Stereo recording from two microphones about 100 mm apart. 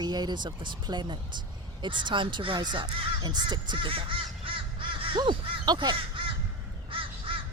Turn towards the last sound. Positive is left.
turn(degrees=-60)  # may be behind; listen again after turning